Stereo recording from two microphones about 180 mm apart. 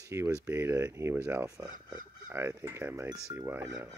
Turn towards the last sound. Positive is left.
turn(degrees=-15)  # may be behind; listen again after turning